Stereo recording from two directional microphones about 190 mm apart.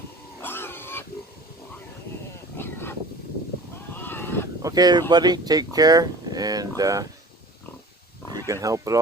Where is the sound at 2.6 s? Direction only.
10° left (ahead or behind).